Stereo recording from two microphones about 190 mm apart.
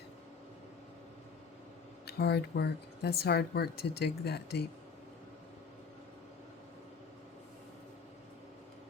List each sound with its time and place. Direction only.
2.0 s speech: 60° left (ahead or behind)